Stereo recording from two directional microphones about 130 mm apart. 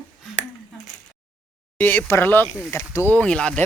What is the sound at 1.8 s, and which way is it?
Speech, 15° left (ahead or behind).